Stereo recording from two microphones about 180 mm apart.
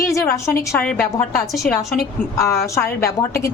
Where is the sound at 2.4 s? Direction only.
15° left (ahead or behind).